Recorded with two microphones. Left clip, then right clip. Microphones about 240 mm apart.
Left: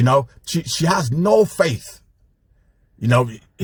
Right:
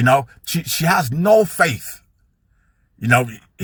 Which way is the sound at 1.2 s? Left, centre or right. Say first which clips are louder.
Right 1 dB; right.